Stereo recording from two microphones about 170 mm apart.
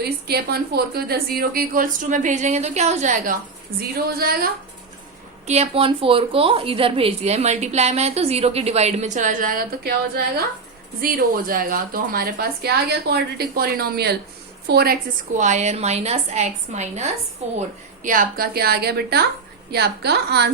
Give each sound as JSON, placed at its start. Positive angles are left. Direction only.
{"t": 0.0, "sound": "a woman's voice", "side_deg": -70}
{"t": 3.8, "sound": "a woman's voice", "side_deg": -65}
{"t": 5.5, "sound": "a woman's voice", "side_deg": -35}
{"t": 15.4, "sound": "a woman's voice", "side_deg": -45}
{"t": 18.0, "sound": "a woman's voice", "side_deg": -50}